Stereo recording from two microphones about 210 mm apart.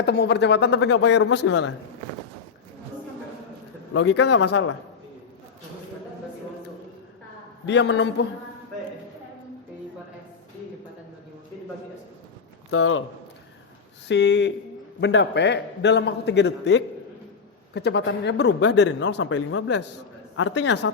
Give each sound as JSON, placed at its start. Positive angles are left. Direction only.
{"t": 0.0, "sound": "a man's voice", "side_deg": 50}
{"t": 1.5, "sound": "speech", "side_deg": 90}
{"t": 4.0, "sound": "a man's voice", "side_deg": 55}
{"t": 7.7, "sound": "a man's voice", "side_deg": 60}
{"t": 12.7, "sound": "a man's voice", "side_deg": 75}
{"t": 14.1, "sound": "a man's voice", "side_deg": 55}
{"t": 20.3, "sound": "a man's voice", "side_deg": 65}